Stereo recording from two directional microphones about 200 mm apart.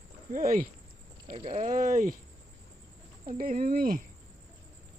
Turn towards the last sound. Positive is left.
turn(degrees=-45)  # may be behind; listen again after turning